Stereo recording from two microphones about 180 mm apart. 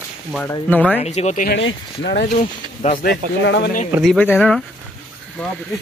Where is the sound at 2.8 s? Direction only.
45° left (ahead or behind).